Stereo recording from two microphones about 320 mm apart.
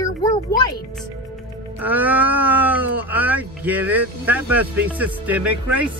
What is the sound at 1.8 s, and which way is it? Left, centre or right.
Speech, centre.